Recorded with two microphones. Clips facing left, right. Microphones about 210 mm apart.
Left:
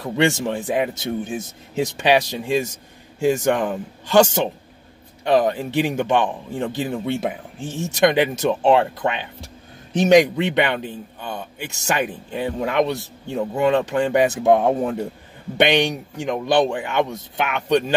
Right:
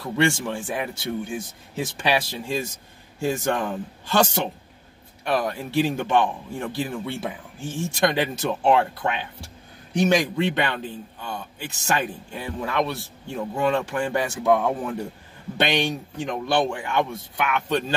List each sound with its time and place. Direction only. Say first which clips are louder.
0.0 s speech: left 3 dB; 15° left (ahead or behind)